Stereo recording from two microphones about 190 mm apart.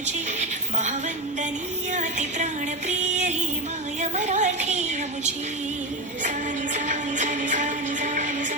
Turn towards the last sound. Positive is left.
turn(degrees=-40)  # may be behind; listen again after turning